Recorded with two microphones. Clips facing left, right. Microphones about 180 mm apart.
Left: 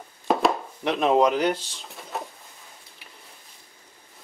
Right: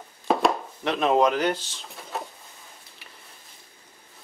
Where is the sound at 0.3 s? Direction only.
Centre (ahead or behind).